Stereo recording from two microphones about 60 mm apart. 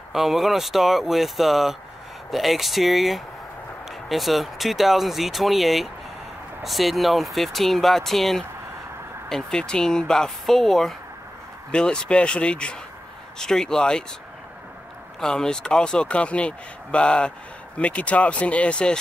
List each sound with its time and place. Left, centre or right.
0.1 s speech: centre
11.7 s speech: centre
15.1 s speech: centre